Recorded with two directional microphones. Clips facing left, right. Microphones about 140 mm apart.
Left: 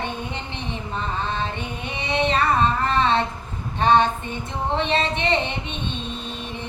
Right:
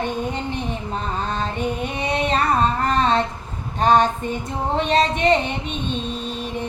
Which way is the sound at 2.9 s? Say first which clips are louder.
Right 1 dB; 45° right (ahead or behind).